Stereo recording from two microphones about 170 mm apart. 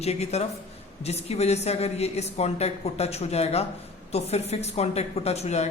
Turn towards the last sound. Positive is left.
turn(degrees=40)  # may be behind; listen again after turning